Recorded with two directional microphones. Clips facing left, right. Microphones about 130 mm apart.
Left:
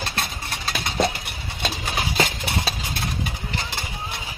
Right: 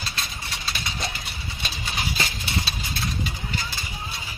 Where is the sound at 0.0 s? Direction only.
55° left (ahead or behind).